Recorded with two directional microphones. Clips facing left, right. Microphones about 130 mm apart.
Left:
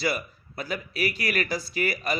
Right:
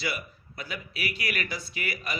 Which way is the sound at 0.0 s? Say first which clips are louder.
Left 6 dB; 40° left (ahead or behind).